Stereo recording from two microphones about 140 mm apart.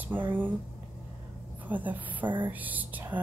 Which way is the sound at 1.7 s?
10° right (ahead or behind).